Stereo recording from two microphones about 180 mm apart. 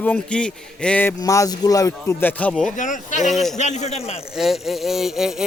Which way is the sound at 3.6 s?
40° left (ahead or behind).